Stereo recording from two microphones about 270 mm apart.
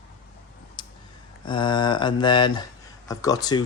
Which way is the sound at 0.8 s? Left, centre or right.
Centre.